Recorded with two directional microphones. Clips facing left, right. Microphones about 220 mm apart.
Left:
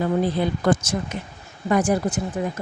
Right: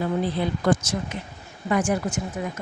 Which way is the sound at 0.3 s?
50° left (ahead or behind).